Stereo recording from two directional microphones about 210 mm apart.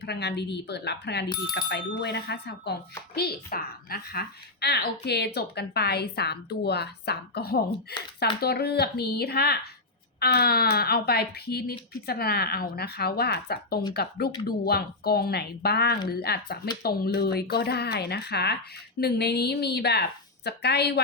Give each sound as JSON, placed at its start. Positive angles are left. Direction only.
{"t": 0.0, "sound": "a woman's voice", "side_deg": 55}